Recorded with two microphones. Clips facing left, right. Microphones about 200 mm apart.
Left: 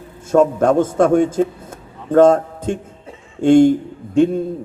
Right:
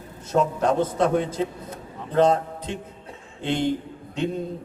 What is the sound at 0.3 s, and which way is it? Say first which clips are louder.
A man's voice: left 8 dB; 50° left (ahead or behind).